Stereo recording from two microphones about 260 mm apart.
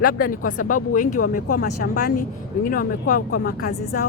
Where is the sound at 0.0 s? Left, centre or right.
Left.